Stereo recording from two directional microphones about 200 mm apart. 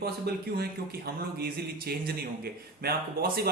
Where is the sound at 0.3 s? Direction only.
55° right (ahead or behind).